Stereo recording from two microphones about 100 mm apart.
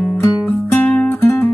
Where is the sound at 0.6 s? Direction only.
20° left (ahead or behind).